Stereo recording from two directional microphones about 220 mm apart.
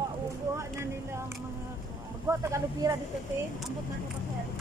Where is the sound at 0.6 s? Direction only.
10° right (ahead or behind).